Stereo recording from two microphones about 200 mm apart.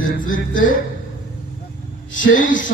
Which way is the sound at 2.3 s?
40° left (ahead or behind).